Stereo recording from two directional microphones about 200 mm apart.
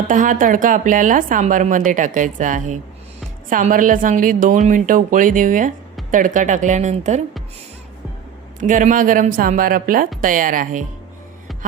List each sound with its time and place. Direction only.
0.1 s a woman's voice: 40° right (ahead or behind)
8.6 s a woman's voice: 40° right (ahead or behind)